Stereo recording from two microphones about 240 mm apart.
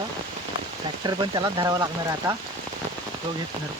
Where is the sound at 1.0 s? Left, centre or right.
Centre.